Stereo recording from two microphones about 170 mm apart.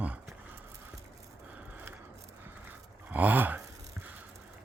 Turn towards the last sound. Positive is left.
turn(degrees=-10)  # may be behind; listen again after turning